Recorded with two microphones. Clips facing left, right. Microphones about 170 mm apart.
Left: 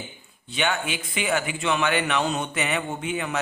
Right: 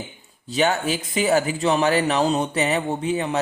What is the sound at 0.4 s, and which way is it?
A man's voice, 40° right (ahead or behind).